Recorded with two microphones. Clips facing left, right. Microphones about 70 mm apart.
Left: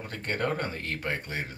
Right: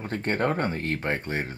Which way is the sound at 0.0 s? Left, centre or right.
Right.